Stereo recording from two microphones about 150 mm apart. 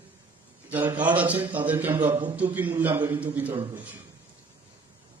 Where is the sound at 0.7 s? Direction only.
10° right (ahead or behind).